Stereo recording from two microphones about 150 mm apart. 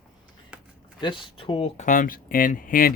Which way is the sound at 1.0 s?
35° left (ahead or behind).